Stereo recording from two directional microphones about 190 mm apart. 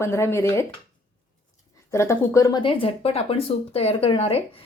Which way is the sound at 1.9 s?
15° left (ahead or behind).